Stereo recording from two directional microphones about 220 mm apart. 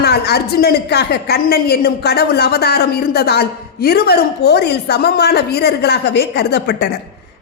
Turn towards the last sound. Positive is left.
turn(degrees=50)  # may be behind; listen again after turning